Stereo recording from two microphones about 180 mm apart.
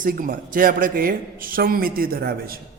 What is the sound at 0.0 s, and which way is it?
A man's voice, 50° right (ahead or behind).